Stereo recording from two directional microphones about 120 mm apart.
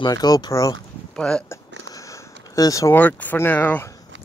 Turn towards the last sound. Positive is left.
turn(degrees=15)  # may be behind; listen again after turning